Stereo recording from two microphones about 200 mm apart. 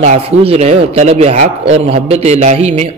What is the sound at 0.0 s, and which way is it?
A man's voice, 30° right (ahead or behind).